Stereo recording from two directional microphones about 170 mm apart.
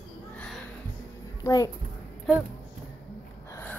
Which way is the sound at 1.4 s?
20° left (ahead or behind).